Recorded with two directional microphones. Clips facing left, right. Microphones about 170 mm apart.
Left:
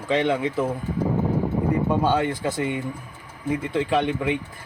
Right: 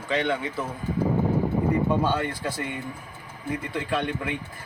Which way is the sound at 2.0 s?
20° left (ahead or behind).